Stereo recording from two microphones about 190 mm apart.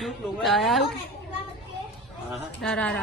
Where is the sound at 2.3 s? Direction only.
5° left (ahead or behind).